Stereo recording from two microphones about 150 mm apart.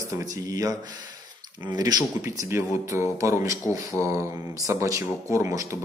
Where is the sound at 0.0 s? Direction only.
25° right (ahead or behind).